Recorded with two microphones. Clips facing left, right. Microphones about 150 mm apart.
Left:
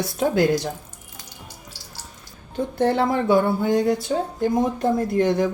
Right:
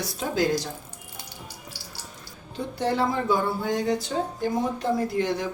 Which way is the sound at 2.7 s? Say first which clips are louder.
Left 5 dB; 60° left (ahead or behind).